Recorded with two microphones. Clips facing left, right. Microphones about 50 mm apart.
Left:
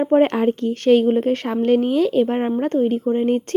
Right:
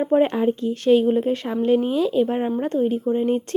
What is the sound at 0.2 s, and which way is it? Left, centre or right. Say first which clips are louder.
A woman's voice: left 2 dB; left.